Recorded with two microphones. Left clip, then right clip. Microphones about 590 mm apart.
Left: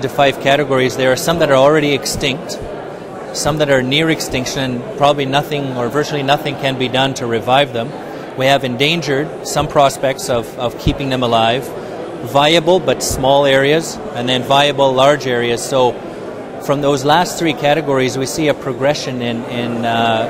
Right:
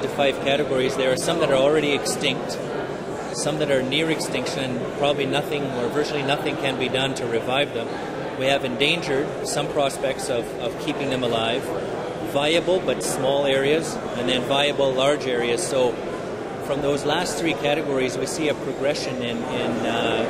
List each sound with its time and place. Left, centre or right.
0.2 s speech: left
3.4 s speech: left
16.8 s speech: left